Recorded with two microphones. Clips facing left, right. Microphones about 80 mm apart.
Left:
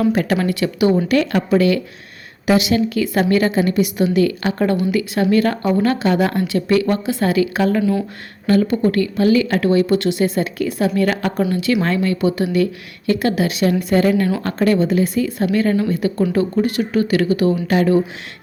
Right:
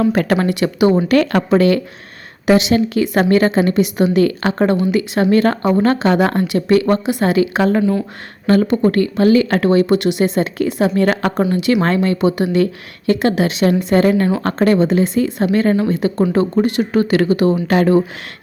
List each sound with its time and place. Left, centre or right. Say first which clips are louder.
0.1 s speech: right 2 dB; right
0.4 s speech: right 2 dB; right
1.1 s speech: right 3 dB; right
1.5 s speech: right 2 dB; right
3.2 s speech: right 3 dB; right
4.5 s speech: right 3 dB; right
5.2 s speech: right 2 dB; right
7.0 s speech: right 2 dB; right
10.0 s speech: right 2 dB; right
12.0 s speech: right 2 dB; right
13.9 s speech: right 1 dB; right
17.5 s speech: right 2 dB; right